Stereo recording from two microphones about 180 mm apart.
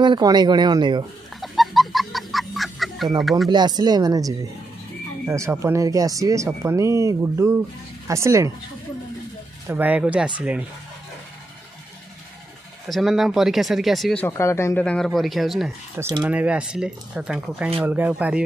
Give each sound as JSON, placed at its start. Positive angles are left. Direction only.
{"t": 0.0, "sound": "speech", "side_deg": -25}
{"t": 1.4, "sound": "chicken", "side_deg": 0}
{"t": 3.2, "sound": "speech", "side_deg": 0}
{"t": 3.4, "sound": "speech", "side_deg": -25}
{"t": 9.7, "sound": "speech", "side_deg": -10}
{"t": 12.8, "sound": "speech", "side_deg": 0}
{"t": 14.2, "sound": "speech", "side_deg": 15}
{"t": 16.0, "sound": "speech", "side_deg": -20}
{"t": 16.3, "sound": "speech", "side_deg": -5}